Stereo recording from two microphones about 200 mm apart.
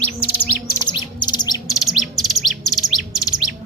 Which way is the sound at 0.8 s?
20° left (ahead or behind).